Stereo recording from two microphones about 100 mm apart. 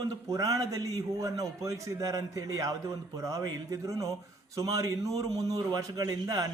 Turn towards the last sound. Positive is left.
turn(degrees=-40)  # may be behind; listen again after turning